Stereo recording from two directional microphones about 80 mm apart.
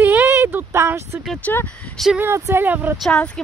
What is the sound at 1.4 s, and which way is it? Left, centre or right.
Speech, left.